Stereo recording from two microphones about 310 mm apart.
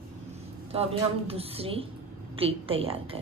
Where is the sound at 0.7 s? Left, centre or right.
Centre.